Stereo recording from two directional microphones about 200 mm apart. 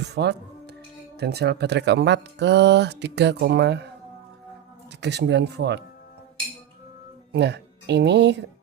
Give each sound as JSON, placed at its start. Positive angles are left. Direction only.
{"t": 0.0, "sound": "speech", "side_deg": -55}
{"t": 4.9, "sound": "speech", "side_deg": -60}
{"t": 7.3, "sound": "speech", "side_deg": -55}